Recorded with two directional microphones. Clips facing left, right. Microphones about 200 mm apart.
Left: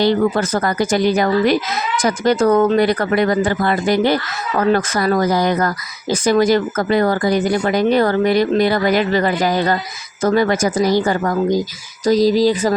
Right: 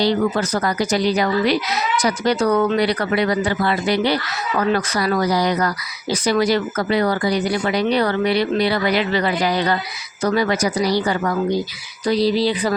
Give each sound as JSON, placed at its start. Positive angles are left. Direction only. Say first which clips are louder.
{"t": 0.0, "sound": "speech", "louder": "left 3 dB", "side_deg": 50}